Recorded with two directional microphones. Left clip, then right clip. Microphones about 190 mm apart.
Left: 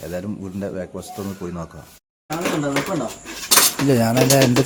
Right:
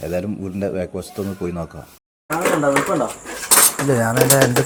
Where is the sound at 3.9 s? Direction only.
35° left (ahead or behind).